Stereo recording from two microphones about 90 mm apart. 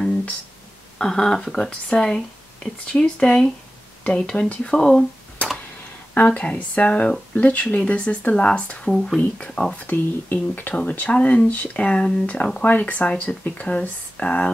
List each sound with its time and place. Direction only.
0.9 s speech: 5° left (ahead or behind)